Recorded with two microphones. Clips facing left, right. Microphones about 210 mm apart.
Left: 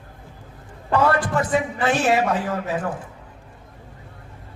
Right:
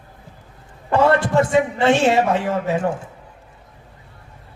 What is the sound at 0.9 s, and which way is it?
Music, 25° right (ahead or behind).